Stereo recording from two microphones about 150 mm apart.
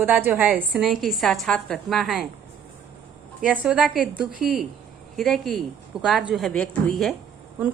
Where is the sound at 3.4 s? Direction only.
10° right (ahead or behind).